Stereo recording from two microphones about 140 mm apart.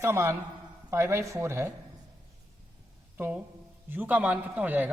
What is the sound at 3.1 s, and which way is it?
A man's voice, 15° right (ahead or behind).